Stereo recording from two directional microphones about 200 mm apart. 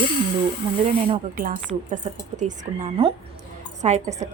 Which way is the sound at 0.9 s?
30° right (ahead or behind).